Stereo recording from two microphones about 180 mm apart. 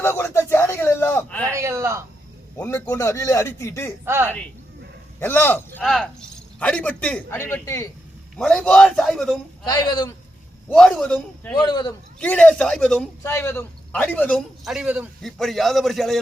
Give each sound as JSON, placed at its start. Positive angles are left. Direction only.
{"t": 0.0, "sound": "a sound", "side_deg": 10}
{"t": 1.5, "sound": "a man's voice", "side_deg": -15}
{"t": 2.6, "sound": "speech", "side_deg": 10}
{"t": 4.0, "sound": "a man's voice", "side_deg": -15}
{"t": 5.2, "sound": "a man's voice", "side_deg": 10}
{"t": 9.6, "sound": "speech", "side_deg": 20}
{"t": 10.7, "sound": "a man's voice", "side_deg": 5}
{"t": 11.5, "sound": "speech", "side_deg": 25}
{"t": 12.2, "sound": "a man's voice", "side_deg": 5}
{"t": 13.2, "sound": "a man's voice", "side_deg": 15}